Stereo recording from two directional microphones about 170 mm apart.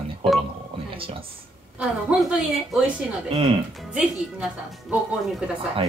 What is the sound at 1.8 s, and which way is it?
A woman's voice, 5° right (ahead or behind).